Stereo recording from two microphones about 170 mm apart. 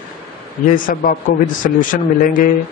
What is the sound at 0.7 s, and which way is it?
Speech, 55° left (ahead or behind).